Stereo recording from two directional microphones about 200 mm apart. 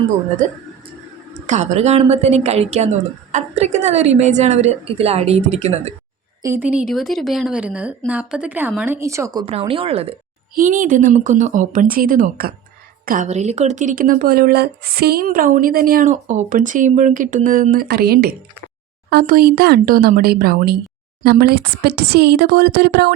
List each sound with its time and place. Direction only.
1.3 s a woman's voice: 35° right (ahead or behind)
6.4 s a woman's voice: 10° right (ahead or behind); by 10.2 s 30° right (ahead or behind)
10.5 s a woman's voice: 40° right (ahead or behind)